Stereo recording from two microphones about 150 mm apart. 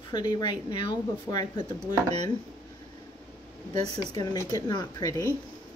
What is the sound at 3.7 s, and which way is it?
Speech, 30° left (ahead or behind).